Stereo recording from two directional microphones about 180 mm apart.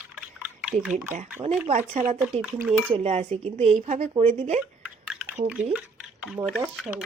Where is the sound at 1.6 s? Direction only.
40° right (ahead or behind).